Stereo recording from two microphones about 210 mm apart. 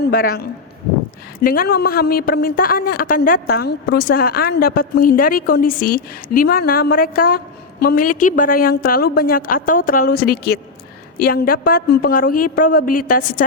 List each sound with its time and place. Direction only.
0.0 s a woman's voice: 45° left (ahead or behind)